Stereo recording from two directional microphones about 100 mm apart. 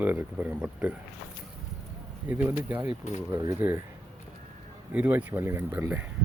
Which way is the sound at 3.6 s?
20° right (ahead or behind).